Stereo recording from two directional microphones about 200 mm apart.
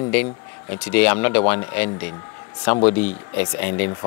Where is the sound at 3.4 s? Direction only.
10° left (ahead or behind).